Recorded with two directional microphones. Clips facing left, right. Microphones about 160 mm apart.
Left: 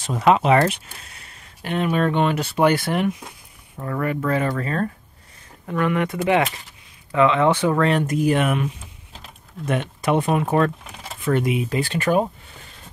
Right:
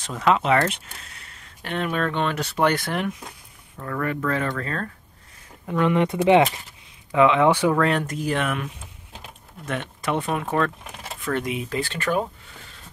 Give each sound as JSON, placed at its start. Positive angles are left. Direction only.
{"t": 0.2, "sound": "speech", "side_deg": 15}
{"t": 5.7, "sound": "speech", "side_deg": -20}
{"t": 7.1, "sound": "speech", "side_deg": -10}
{"t": 7.7, "sound": "speech", "side_deg": 0}
{"t": 8.1, "sound": "speech", "side_deg": 10}
{"t": 9.7, "sound": "speech", "side_deg": 15}